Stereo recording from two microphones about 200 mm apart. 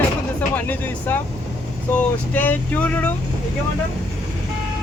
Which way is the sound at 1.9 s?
10° left (ahead or behind).